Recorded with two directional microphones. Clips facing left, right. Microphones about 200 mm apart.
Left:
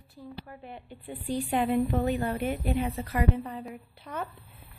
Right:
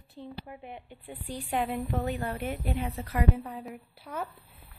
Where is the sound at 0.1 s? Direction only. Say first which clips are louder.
Right 1 dB; 20° right (ahead or behind).